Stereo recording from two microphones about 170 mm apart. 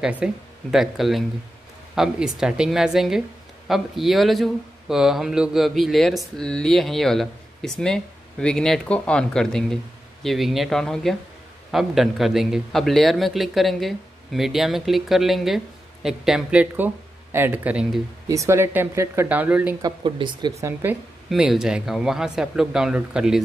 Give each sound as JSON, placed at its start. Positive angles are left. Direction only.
{"t": 0.0, "sound": "a woman's voice", "side_deg": -5}
{"t": 19.8, "sound": "speech", "side_deg": -25}
{"t": 21.3, "sound": "a woman's voice", "side_deg": -5}